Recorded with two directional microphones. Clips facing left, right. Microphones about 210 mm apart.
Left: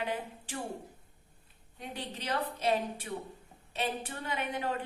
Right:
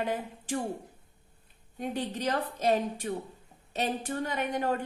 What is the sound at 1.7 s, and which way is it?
A woman's voice, 45° right (ahead or behind).